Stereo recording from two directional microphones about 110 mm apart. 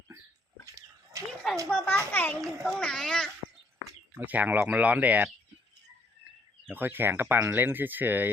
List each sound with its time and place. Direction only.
0.6 s livestock: 30° right (ahead or behind)
1.7 s a child's voice: 15° left (ahead or behind)
4.2 s speech: 15° right (ahead or behind)
6.7 s speech: 20° right (ahead or behind)